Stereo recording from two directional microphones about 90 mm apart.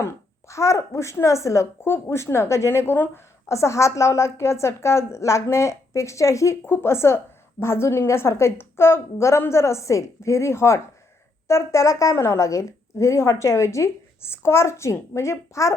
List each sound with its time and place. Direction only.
0.0 s a woman's voice: 35° left (ahead or behind)